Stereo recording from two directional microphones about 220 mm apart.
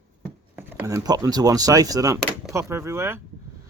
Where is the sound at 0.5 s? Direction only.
10° right (ahead or behind).